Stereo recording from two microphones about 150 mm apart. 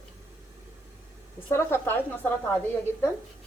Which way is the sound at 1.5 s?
15° left (ahead or behind).